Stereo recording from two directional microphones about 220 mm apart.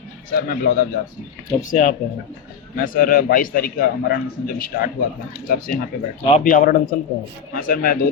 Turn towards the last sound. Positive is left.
turn(degrees=40)  # may be behind; listen again after turning